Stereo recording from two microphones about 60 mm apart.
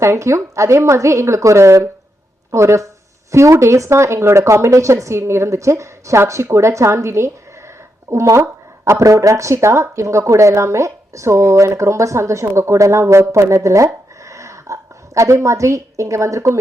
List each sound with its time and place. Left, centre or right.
0.0 s a woman's voice: right